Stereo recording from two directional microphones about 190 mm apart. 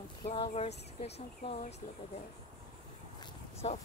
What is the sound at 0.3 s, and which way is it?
Speech, 30° left (ahead or behind).